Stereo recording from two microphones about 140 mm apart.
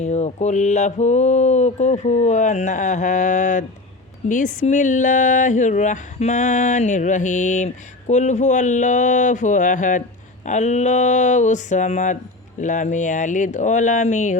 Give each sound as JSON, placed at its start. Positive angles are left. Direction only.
{"t": 0.0, "sound": "speech", "side_deg": 55}